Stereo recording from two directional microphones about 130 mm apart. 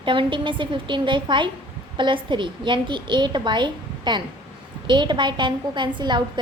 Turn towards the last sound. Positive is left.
turn(degrees=-35)  # may be behind; listen again after turning